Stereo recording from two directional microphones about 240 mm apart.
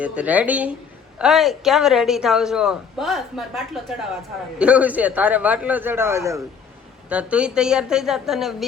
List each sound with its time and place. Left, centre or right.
0.0 s a man's voice: centre